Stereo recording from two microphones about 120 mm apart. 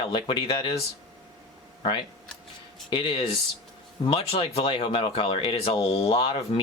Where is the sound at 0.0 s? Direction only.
45° left (ahead or behind).